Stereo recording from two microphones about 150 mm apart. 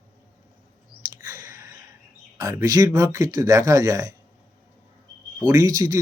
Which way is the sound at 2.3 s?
25° right (ahead or behind).